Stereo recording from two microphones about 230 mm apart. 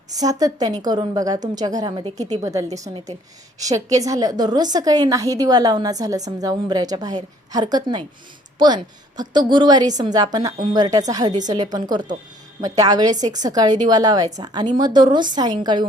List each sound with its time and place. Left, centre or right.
0.1 s a woman's voice: centre